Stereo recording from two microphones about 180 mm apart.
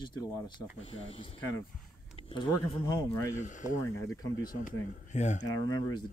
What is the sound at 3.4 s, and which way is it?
Speech, 45° left (ahead or behind).